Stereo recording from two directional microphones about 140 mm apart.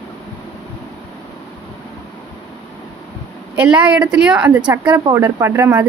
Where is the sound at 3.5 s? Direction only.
5° right (ahead or behind).